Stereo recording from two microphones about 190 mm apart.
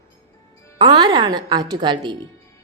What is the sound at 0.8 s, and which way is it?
A woman's voice, 25° right (ahead or behind).